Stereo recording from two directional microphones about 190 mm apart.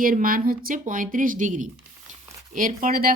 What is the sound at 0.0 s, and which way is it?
A woman's voice, 50° right (ahead or behind).